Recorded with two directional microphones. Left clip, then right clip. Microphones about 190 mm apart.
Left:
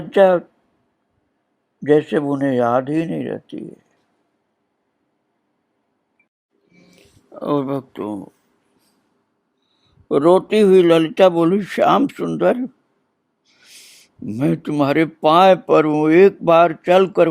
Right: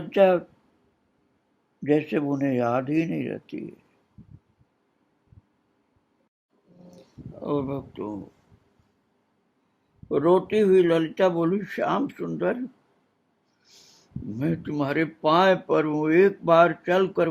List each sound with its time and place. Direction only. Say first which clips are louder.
0.1 s speech: left 6 dB; 30° left (ahead or behind)
1.8 s speech: left 8 dB; 30° left (ahead or behind)
7.3 s speech: left 8 dB; 40° left (ahead or behind)
10.1 s speech: left 7 dB; 45° left (ahead or behind)
14.3 s speech: left 9 dB; 40° left (ahead or behind)